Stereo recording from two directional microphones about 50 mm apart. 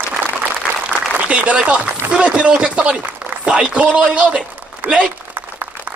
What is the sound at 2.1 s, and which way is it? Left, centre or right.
Chopping, right.